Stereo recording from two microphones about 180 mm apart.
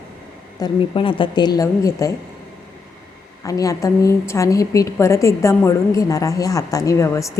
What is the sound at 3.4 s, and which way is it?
A woman's voice, 20° left (ahead or behind).